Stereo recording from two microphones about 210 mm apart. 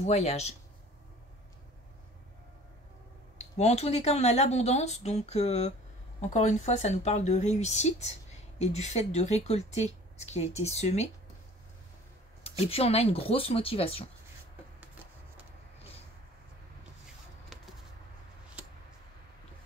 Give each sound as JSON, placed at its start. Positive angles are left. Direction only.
{"t": 0.0, "sound": "speech", "side_deg": 30}
{"t": 3.3, "sound": "speech", "side_deg": 30}
{"t": 12.4, "sound": "speech", "side_deg": 30}